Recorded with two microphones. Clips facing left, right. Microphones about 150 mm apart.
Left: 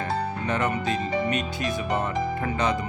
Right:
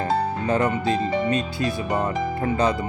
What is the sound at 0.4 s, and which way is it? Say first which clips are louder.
Speech: right 4 dB; 30° right (ahead or behind).